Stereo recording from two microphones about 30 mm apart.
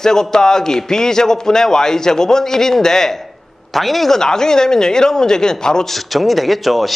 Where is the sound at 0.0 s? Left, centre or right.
Centre.